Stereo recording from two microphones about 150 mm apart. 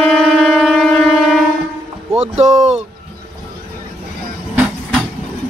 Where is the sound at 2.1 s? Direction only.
45° right (ahead or behind).